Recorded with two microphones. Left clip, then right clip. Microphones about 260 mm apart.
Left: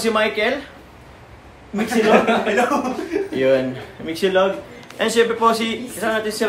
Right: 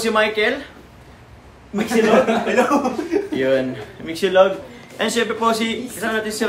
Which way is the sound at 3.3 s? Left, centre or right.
Centre.